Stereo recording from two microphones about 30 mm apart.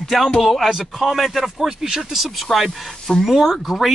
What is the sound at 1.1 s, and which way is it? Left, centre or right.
A man's voice, centre.